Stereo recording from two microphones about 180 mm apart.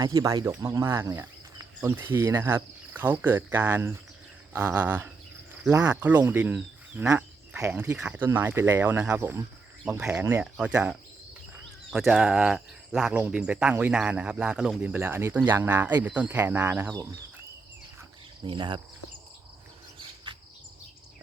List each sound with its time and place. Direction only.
0.0 s speech: 20° right (ahead or behind)
18.4 s cricket: 25° right (ahead or behind)